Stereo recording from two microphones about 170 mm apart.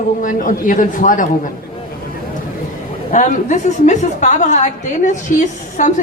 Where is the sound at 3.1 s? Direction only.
45° left (ahead or behind).